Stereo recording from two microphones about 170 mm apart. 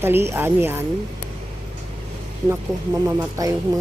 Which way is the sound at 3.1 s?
20° right (ahead or behind).